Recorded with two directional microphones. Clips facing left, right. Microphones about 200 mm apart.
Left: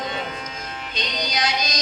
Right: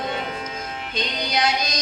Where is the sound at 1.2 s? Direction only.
60° right (ahead or behind).